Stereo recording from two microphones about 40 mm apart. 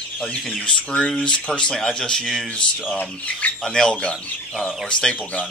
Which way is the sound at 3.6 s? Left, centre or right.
Centre.